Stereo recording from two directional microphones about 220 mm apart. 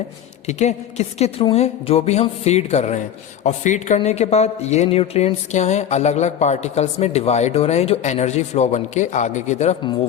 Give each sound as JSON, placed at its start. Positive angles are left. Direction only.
{"t": 0.4, "sound": "a woman's voice", "side_deg": 30}